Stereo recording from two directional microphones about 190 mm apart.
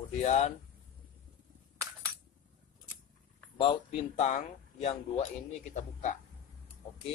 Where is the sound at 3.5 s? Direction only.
30° left (ahead or behind).